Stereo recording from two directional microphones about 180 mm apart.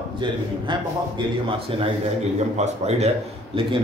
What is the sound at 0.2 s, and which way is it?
A man's voice, 25° right (ahead or behind).